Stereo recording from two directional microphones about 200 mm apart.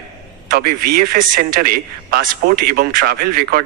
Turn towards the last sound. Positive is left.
turn(degrees=-50)  # may be behind; listen again after turning